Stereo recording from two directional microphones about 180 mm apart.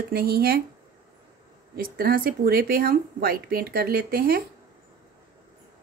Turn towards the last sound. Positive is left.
turn(degrees=-55)  # may be behind; listen again after turning